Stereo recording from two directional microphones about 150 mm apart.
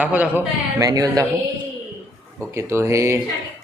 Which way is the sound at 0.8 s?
20° right (ahead or behind).